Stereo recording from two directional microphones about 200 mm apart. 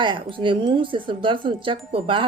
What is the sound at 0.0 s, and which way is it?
Speech, 25° right (ahead or behind).